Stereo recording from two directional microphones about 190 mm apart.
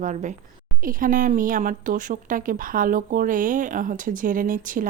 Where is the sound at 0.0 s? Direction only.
40° right (ahead or behind).